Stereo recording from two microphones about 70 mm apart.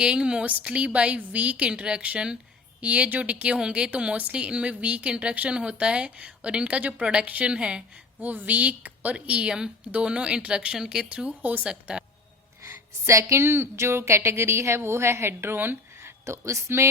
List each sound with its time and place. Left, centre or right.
0.0 s speech: centre
8.2 s speech: right
12.6 s a woman's voice: right